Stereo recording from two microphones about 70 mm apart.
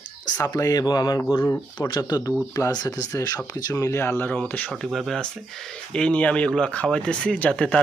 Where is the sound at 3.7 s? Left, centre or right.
Left.